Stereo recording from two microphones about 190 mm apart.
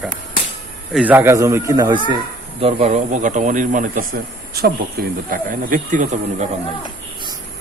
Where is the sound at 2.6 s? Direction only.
35° right (ahead or behind).